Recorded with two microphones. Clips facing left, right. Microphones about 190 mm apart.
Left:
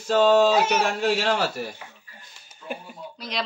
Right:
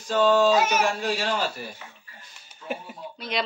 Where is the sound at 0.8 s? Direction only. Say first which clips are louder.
Left 3 dB; 70° left (ahead or behind).